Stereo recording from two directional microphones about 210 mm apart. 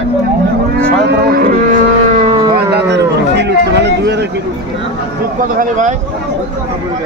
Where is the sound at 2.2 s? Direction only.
25° right (ahead or behind).